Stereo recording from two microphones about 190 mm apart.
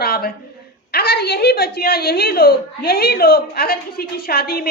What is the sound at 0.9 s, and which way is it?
A woman's voice, 55° left (ahead or behind).